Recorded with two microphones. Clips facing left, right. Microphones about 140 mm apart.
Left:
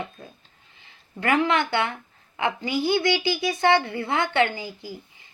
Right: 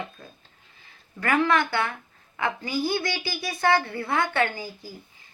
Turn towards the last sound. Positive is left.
turn(degrees=20)  # may be behind; listen again after turning